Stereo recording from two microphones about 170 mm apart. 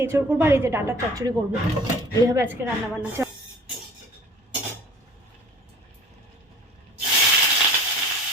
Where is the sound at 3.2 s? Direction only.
15° right (ahead or behind).